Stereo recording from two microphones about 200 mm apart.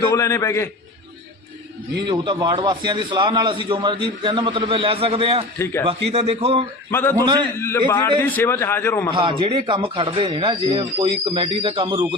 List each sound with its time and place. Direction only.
0.0 s a man's voice: 15° left (ahead or behind)
2.0 s a man's voice: 25° right (ahead or behind)
5.5 s a man's voice: 15° left (ahead or behind)
5.8 s a man's voice: 30° right (ahead or behind)
6.9 s a man's voice: 10° left (ahead or behind)
9.1 s a man's voice: 25° right (ahead or behind)